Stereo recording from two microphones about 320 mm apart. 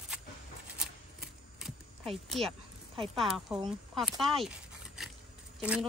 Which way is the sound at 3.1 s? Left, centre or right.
Centre.